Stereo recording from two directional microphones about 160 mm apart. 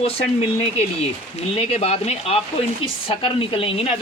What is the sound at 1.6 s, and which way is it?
Speech, 40° left (ahead or behind).